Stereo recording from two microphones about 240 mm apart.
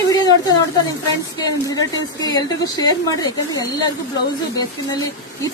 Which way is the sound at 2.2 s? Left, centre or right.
Centre.